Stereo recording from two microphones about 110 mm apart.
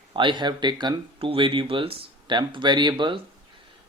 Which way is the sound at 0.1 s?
50° right (ahead or behind).